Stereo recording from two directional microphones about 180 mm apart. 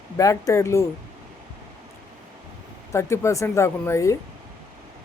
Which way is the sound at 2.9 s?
15° left (ahead or behind).